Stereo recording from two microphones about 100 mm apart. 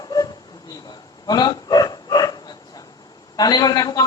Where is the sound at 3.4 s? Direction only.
40° left (ahead or behind).